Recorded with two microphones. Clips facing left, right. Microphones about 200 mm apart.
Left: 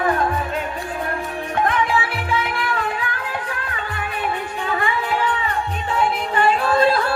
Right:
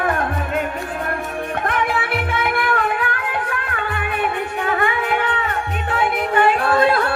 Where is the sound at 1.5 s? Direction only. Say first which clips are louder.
Left 3 dB; 60° right (ahead or behind).